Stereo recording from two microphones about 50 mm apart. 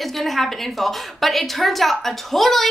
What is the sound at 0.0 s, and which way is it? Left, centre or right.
A woman's voice, centre.